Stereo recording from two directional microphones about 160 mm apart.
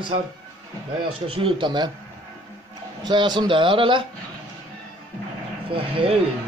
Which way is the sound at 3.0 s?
25° right (ahead or behind).